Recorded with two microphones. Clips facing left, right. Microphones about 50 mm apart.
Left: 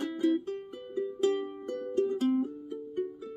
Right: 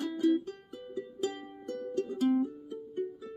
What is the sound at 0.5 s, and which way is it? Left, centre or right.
Music, left.